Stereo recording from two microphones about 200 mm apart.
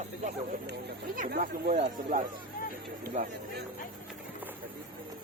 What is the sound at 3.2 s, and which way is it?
Speech, 40° right (ahead or behind).